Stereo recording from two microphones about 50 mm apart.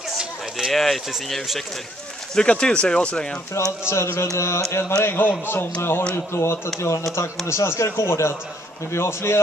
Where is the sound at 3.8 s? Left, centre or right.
Left.